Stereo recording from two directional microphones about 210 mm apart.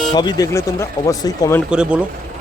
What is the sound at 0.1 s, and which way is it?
Speech, 20° left (ahead or behind).